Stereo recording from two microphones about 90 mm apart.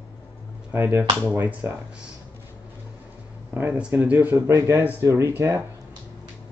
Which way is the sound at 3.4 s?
25° right (ahead or behind).